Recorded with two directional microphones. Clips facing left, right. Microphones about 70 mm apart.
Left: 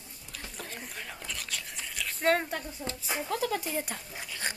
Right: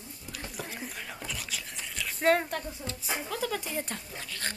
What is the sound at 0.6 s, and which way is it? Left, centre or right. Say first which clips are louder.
Whispering: right 1 dB; centre.